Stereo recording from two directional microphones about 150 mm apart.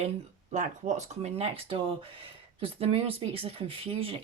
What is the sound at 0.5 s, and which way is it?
Speech, 55° right (ahead or behind).